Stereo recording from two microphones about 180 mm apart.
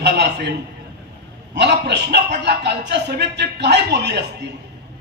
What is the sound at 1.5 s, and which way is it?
A man's voice, 70° right (ahead or behind).